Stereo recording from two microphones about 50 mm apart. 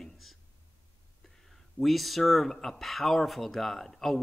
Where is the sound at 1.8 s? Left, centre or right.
Centre.